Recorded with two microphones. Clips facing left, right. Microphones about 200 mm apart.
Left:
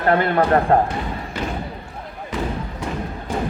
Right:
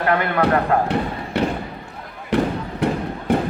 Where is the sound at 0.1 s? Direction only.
30° left (ahead or behind).